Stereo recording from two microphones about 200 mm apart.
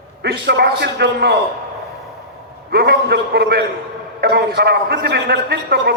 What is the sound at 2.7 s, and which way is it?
A man's voice, 50° right (ahead or behind).